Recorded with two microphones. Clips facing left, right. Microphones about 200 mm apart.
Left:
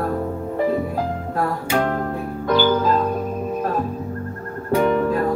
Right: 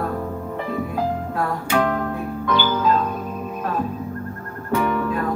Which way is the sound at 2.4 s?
40° left (ahead or behind).